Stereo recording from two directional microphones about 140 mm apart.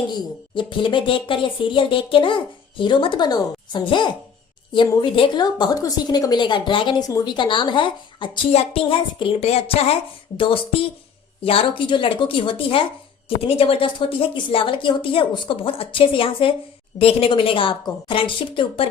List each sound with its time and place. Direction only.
0.5 s a woman's voice: 35° left (ahead or behind)